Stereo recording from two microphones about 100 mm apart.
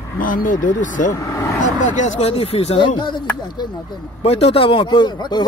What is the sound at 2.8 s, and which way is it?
Speech, 50° left (ahead or behind).